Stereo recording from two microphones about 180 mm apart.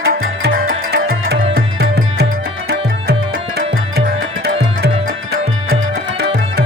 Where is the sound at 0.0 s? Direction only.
55° right (ahead or behind).